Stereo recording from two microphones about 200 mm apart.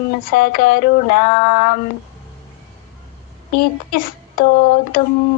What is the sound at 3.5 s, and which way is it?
Child singing, 45° left (ahead or behind).